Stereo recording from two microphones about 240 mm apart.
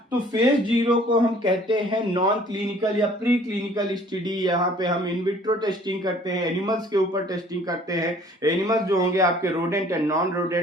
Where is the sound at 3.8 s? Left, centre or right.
Centre.